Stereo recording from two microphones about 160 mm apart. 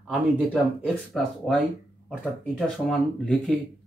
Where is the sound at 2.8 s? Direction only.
Centre (ahead or behind).